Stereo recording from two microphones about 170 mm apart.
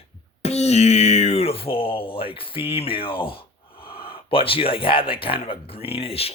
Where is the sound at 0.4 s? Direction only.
40° left (ahead or behind).